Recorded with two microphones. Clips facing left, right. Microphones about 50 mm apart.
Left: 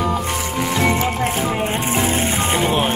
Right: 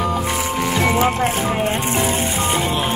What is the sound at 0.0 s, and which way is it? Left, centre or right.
Music, centre.